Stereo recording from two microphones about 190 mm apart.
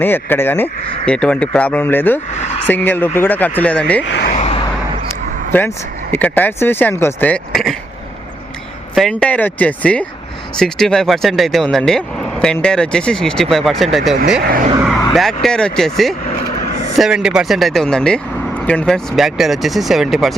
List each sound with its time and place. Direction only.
0.0 s speech: 10° left (ahead or behind)
4.0 s speech: 65° left (ahead or behind)
4.3 s a sound: 35° left (ahead or behind)
5.5 s speech: 10° left (ahead or behind)
9.0 s speech: 5° left (ahead or behind)
14.4 s speech: 50° right (ahead or behind)
15.1 s speech: centre (ahead or behind)